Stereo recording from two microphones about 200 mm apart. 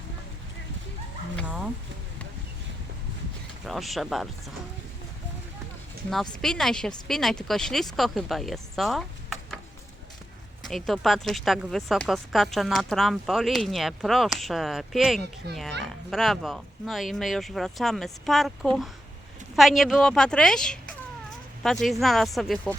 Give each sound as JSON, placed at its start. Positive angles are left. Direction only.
{"t": 3.6, "sound": "speech", "side_deg": 0}
{"t": 6.4, "sound": "speech", "side_deg": 0}
{"t": 10.7, "sound": "speech", "side_deg": 0}
{"t": 15.4, "sound": "speech", "side_deg": -55}
{"t": 15.8, "sound": "speech", "side_deg": 0}